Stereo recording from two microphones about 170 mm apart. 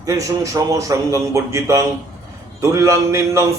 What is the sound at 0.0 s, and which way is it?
A man's voice, 20° right (ahead or behind).